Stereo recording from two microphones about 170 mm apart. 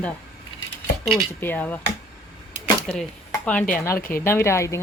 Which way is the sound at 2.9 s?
5° left (ahead or behind).